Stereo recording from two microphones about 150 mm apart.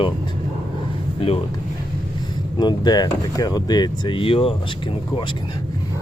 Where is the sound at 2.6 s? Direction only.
30° left (ahead or behind).